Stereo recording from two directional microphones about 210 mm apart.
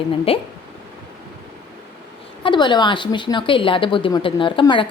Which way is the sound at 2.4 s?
20° left (ahead or behind).